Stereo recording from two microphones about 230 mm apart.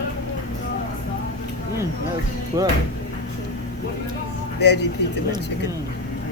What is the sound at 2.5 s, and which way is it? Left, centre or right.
Speech, centre.